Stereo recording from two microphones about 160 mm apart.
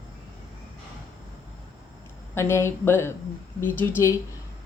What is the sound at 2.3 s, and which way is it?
A woman's voice, 15° left (ahead or behind).